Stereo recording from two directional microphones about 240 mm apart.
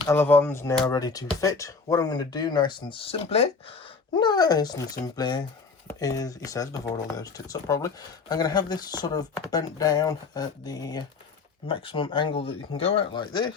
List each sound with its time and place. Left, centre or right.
0.0 s speech: centre